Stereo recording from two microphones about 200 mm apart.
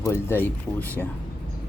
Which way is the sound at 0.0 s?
15° left (ahead or behind).